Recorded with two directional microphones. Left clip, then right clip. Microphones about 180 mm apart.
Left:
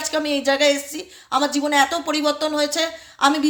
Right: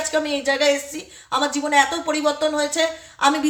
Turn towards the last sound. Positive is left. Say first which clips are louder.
# even
turn(degrees=35)  # may be behind; listen again after turning